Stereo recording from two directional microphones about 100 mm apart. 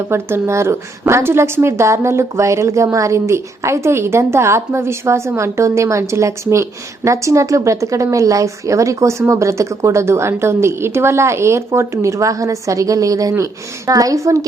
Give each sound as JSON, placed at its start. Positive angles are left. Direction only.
{"t": 0.1, "sound": "a woman's voice", "side_deg": -25}